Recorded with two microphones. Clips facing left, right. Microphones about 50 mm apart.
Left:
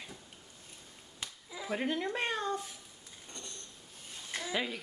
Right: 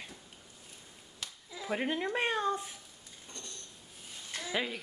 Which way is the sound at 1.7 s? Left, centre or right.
Centre.